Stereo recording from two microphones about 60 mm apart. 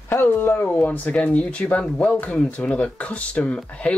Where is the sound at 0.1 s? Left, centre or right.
Left.